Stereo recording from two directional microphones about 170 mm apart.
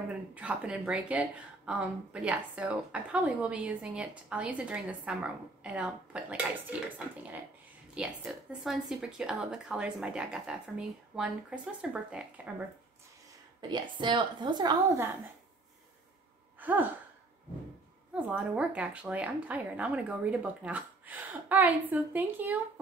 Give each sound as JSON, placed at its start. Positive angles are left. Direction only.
{"t": 0.3, "sound": "speech", "side_deg": -5}
{"t": 7.9, "sound": "speech", "side_deg": -5}
{"t": 13.6, "sound": "a woman's voice", "side_deg": -25}
{"t": 16.5, "sound": "sigh", "side_deg": -10}
{"t": 18.1, "sound": "speech", "side_deg": -10}